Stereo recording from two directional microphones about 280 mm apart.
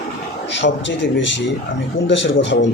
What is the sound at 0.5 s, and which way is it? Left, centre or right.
A man's voice, left.